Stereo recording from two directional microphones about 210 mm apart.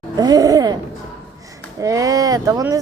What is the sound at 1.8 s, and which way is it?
Speech, 15° right (ahead or behind).